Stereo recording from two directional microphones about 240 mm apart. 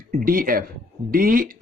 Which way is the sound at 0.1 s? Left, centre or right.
Right.